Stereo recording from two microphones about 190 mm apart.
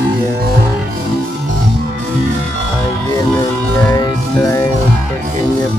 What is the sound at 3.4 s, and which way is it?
Music, 15° left (ahead or behind).